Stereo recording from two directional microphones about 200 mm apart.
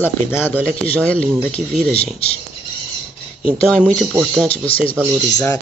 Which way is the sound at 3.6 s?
5° left (ahead or behind).